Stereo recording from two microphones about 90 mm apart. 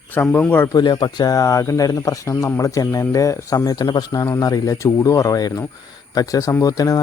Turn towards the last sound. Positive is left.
turn(degrees=40)  # may be behind; listen again after turning